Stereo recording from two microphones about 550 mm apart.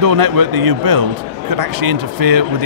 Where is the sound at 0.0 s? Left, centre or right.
Right.